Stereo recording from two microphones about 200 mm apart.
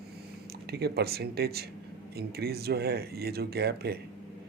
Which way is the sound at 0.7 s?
50° right (ahead or behind).